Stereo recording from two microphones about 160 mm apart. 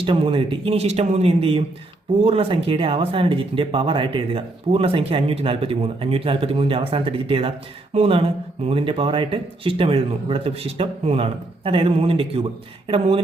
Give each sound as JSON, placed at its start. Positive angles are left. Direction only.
{"t": 0.0, "sound": "speech", "side_deg": -35}